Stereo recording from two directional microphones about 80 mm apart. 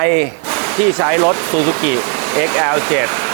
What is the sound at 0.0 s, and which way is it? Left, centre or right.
Speech, right.